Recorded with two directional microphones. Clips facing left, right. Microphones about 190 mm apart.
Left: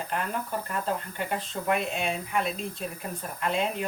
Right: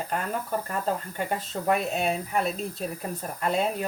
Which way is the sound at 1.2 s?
40° right (ahead or behind).